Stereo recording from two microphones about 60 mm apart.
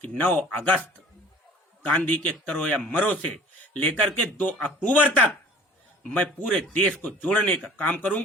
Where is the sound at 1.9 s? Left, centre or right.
Left.